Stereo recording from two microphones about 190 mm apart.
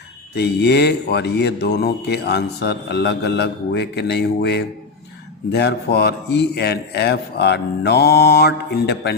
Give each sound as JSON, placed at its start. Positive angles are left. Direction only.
{"t": 0.3, "sound": "speech", "side_deg": 60}